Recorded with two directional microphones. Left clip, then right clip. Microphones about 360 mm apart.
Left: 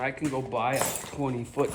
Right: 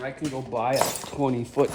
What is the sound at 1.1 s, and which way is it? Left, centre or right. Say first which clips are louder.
Speech: right 6 dB; right.